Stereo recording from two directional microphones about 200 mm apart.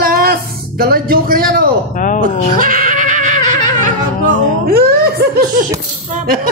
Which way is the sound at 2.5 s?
40° right (ahead or behind).